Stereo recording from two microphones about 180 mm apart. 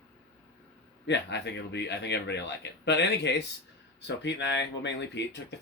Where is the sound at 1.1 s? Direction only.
75° left (ahead or behind).